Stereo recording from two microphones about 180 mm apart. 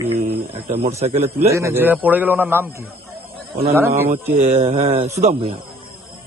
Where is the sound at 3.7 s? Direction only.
15° right (ahead or behind).